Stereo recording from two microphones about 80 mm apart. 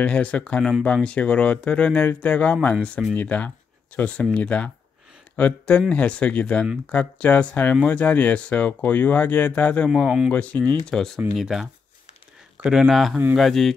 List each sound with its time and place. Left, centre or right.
0.0 s speech: centre
10.0 s speech: centre
10.3 s speech: centre
11.3 s speech: centre